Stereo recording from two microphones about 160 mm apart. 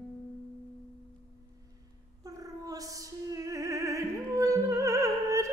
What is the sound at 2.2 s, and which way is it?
Opera, 20° right (ahead or behind).